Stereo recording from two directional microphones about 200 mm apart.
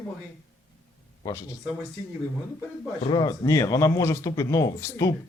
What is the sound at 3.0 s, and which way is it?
Speech, 25° left (ahead or behind).